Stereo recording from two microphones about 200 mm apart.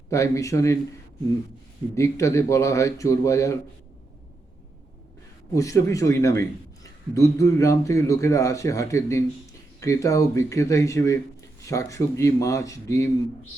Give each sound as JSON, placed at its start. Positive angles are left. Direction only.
{"t": 0.1, "sound": "speech", "side_deg": 15}
{"t": 2.0, "sound": "speech", "side_deg": 15}
{"t": 5.5, "sound": "speech", "side_deg": 15}